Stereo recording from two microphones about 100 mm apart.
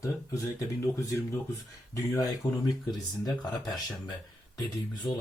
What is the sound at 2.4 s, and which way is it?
Speech, 40° left (ahead or behind).